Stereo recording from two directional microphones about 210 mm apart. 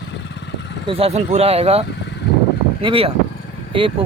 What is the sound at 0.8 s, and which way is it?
Speech, 25° right (ahead or behind).